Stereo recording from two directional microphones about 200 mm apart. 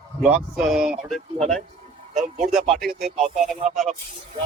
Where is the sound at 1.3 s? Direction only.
30° right (ahead or behind).